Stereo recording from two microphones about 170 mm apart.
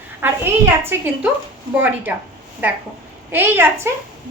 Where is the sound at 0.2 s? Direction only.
10° right (ahead or behind).